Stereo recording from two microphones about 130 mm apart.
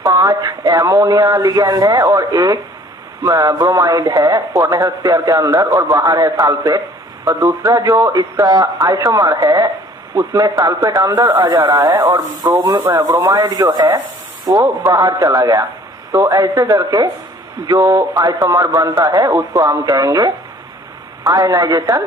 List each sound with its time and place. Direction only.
0.0 s a man's voice: 25° right (ahead or behind)